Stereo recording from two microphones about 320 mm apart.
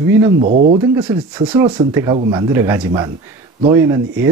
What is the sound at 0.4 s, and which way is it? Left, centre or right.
Speech, right.